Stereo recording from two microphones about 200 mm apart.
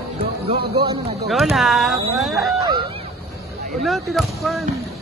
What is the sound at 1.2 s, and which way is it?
Speech, centre (ahead or behind).